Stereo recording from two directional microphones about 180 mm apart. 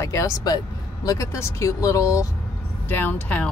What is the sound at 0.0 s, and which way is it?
Speech, 20° left (ahead or behind).